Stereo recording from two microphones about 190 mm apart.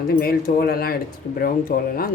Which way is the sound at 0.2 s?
50° left (ahead or behind).